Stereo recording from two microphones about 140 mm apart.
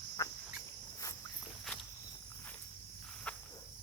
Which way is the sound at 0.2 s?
20° left (ahead or behind).